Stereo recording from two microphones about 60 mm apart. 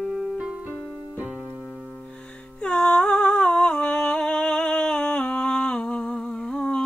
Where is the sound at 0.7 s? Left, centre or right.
Right.